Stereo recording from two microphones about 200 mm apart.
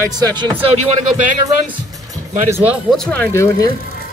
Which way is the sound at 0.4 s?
25° right (ahead or behind).